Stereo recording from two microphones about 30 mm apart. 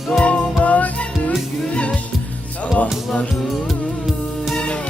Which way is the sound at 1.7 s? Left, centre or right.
Left.